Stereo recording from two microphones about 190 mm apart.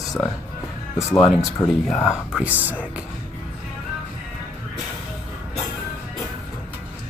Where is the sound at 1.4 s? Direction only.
Centre (ahead or behind).